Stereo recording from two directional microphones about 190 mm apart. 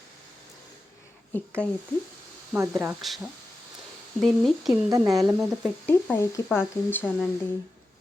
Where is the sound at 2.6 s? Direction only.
15° right (ahead or behind).